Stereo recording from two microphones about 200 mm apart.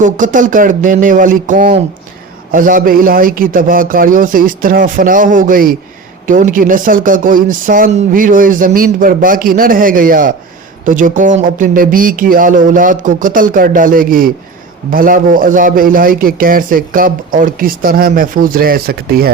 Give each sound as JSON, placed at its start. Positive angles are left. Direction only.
{"t": 0.0, "sound": "a man's voice", "side_deg": -40}